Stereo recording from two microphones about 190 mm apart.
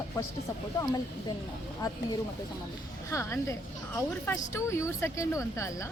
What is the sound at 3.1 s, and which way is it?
A woman's voice, 15° left (ahead or behind).